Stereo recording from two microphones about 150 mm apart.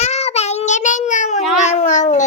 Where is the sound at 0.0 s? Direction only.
45° left (ahead or behind).